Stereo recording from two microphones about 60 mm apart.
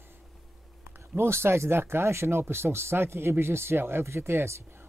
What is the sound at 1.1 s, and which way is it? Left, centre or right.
Speech, right.